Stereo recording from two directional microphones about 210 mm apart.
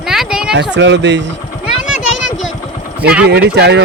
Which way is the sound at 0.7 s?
60° right (ahead or behind).